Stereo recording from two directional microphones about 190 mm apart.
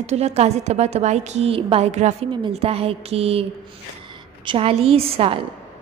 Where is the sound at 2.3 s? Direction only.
25° right (ahead or behind).